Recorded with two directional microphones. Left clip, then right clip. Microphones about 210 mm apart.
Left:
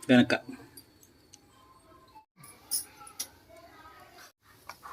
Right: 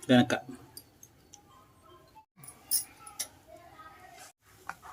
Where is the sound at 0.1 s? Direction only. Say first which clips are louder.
Left 1 dB; centre (ahead or behind).